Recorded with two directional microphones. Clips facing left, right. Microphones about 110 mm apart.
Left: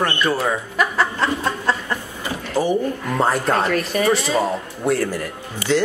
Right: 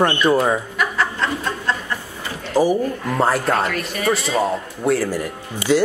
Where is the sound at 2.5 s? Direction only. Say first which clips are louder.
Right 3 dB; 10° right (ahead or behind).